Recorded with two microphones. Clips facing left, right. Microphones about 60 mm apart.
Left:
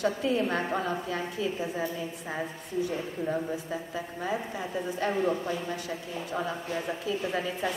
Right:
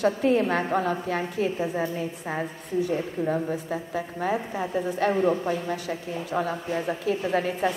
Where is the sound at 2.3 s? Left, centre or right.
Right.